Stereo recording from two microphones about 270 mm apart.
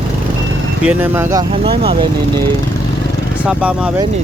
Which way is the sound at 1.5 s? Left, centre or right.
Centre.